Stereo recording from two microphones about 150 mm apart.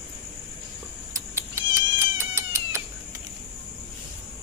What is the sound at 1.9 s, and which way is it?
Cat, 20° right (ahead or behind).